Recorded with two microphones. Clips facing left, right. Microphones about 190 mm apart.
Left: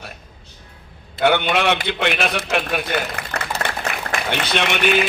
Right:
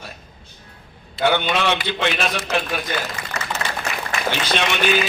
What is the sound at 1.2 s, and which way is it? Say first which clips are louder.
A man's voice: left 2 dB; 60° left (ahead or behind).